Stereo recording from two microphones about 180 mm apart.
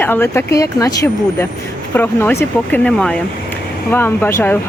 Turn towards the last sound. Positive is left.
turn(degrees=10)  # may be behind; listen again after turning